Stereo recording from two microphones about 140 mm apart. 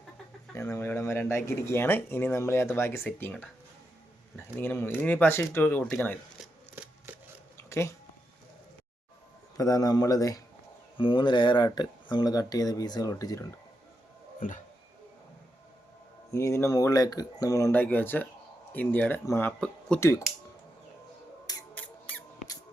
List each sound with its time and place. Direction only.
0.5 s speech: 20° left (ahead or behind)
4.5 s speech: 15° left (ahead or behind)
6.4 s a sound: 10° right (ahead or behind)
7.5 s a sound: 20° left (ahead or behind)
9.6 s speech: 25° left (ahead or behind)
10.9 s speech: 40° left (ahead or behind)
14.3 s speech: 70° left (ahead or behind)
16.3 s speech: 20° left (ahead or behind)
17.7 s speech: 10° left (ahead or behind)
19.5 s speech: 5° left (ahead or behind)
20.0 s speech: 20° left (ahead or behind)
21.8 s mouse: 10° left (ahead or behind)